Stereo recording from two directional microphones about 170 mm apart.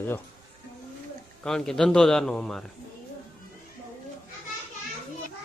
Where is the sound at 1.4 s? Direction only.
5° left (ahead or behind).